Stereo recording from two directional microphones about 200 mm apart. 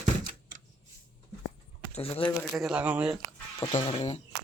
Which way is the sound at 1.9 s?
30° left (ahead or behind).